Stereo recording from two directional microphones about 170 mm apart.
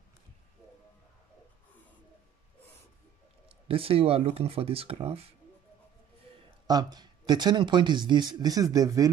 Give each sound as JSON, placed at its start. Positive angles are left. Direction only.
{"t": 3.4, "sound": "speech", "side_deg": -35}
{"t": 6.7, "sound": "speech", "side_deg": -25}